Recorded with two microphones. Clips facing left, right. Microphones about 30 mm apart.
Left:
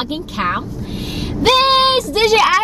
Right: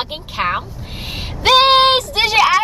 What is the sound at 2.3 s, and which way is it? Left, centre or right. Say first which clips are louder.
Speech: right 2 dB; centre.